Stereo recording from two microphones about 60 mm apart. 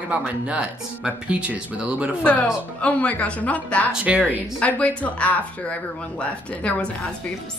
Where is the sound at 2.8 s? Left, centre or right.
Left.